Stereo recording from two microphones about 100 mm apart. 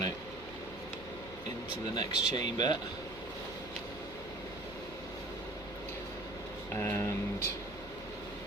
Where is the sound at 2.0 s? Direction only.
45° left (ahead or behind).